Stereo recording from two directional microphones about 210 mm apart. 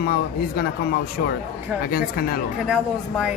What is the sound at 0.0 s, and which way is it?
Speech, 45° left (ahead or behind).